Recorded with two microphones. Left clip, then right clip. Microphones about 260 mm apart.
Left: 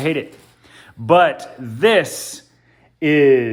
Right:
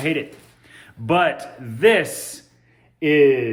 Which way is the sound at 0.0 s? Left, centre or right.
Centre.